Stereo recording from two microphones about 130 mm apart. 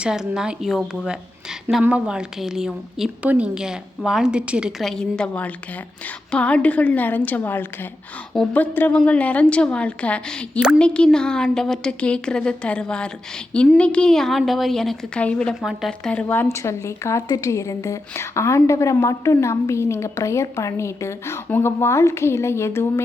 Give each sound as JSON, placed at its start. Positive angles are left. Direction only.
{"t": 0.0, "sound": "a woman's voice", "side_deg": -5}
{"t": 4.8, "sound": "a woman's voice", "side_deg": 5}
{"t": 16.2, "sound": "a woman's voice", "side_deg": 15}